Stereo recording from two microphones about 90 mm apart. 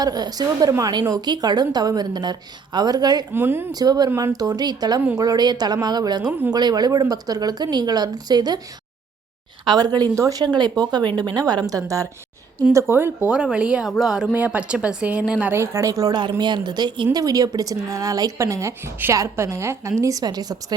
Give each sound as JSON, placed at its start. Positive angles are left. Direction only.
{"t": 0.0, "sound": "a woman's voice", "side_deg": -45}
{"t": 3.3, "sound": "speech", "side_deg": -25}
{"t": 3.7, "sound": "a woman's voice", "side_deg": -45}
{"t": 9.6, "sound": "a woman's voice", "side_deg": -50}
{"t": 12.7, "sound": "speech", "side_deg": -25}
{"t": 13.2, "sound": "speech", "side_deg": -10}
{"t": 15.5, "sound": "a woman's voice", "side_deg": -35}
{"t": 16.4, "sound": "a woman's voice", "side_deg": -55}